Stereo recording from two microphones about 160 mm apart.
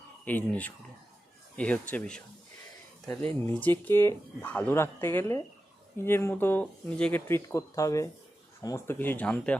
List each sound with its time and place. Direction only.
0.3 s speech: 10° left (ahead or behind)
3.4 s speech: 15° left (ahead or behind)